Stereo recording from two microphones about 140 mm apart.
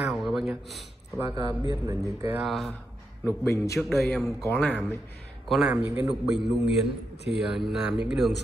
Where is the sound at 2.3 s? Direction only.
Centre (ahead or behind).